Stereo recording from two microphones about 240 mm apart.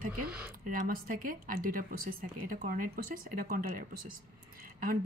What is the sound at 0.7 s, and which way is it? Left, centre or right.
Speech, right.